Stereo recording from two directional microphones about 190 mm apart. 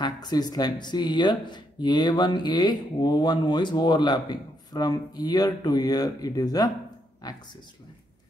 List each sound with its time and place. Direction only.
0.0 s speech: 20° left (ahead or behind)